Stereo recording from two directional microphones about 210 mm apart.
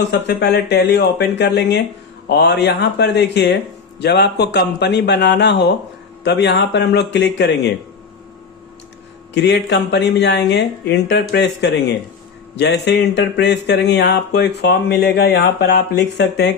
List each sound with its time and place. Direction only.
0.1 s speech: 55° left (ahead or behind)
9.3 s speech: 55° left (ahead or behind)